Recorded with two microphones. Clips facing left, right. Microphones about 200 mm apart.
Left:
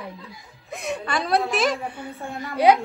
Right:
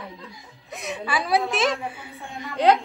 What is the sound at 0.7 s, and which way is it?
A woman's voice, centre (ahead or behind).